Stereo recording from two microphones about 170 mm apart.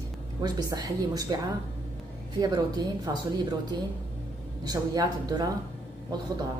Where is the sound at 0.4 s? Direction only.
25° right (ahead or behind).